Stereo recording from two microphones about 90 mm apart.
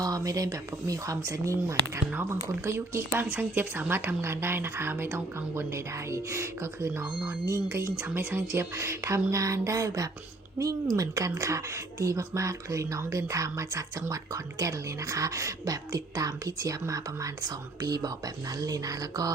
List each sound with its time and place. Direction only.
0.0 s speech: 40° right (ahead or behind)